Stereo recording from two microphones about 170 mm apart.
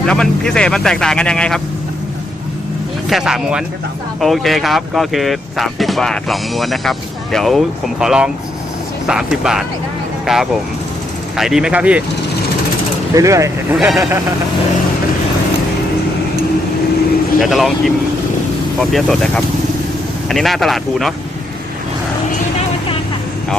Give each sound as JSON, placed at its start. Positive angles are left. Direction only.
{"t": 0.0, "sound": "speech", "side_deg": 5}
{"t": 3.1, "sound": "speech", "side_deg": 0}
{"t": 13.1, "sound": "speech", "side_deg": -20}
{"t": 13.7, "sound": "speech", "side_deg": 0}
{"t": 17.4, "sound": "speech", "side_deg": 0}